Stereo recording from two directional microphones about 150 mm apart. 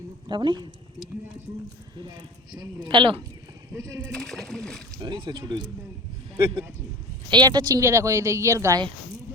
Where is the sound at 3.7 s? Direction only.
20° right (ahead or behind).